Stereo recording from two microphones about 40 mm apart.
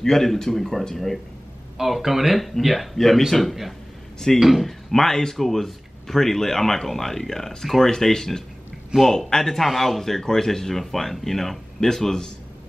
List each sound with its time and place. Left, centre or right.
0.0 s speech: centre
1.8 s speech: centre
4.6 s speech: centre
8.9 s a man's voice: centre
9.3 s speech: centre